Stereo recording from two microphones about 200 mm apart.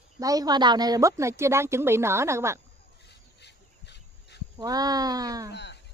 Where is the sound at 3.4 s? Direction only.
60° left (ahead or behind).